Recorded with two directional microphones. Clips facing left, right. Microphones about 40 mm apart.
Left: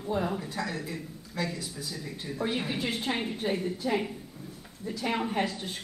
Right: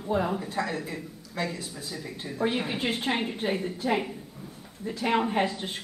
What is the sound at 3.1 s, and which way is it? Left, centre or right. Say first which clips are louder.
Speech: right 2 dB; right.